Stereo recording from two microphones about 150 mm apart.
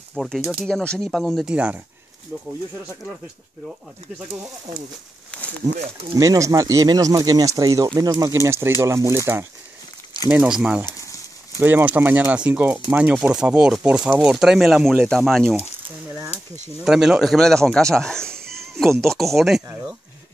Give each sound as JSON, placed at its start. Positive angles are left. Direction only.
{"t": 0.1, "sound": "speech", "side_deg": 0}
{"t": 5.3, "sound": "a sound", "side_deg": 10}
{"t": 5.8, "sound": "speech", "side_deg": -45}
{"t": 6.1, "sound": "speech", "side_deg": -20}
{"t": 10.9, "sound": "a sound", "side_deg": 20}
{"t": 11.6, "sound": "speech", "side_deg": -10}
{"t": 16.3, "sound": "speech", "side_deg": 45}
{"t": 16.8, "sound": "speech", "side_deg": -5}